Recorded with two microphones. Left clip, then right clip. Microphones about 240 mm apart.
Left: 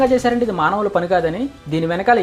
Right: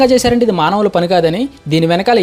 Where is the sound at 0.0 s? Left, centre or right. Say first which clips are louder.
Right 5 dB; right.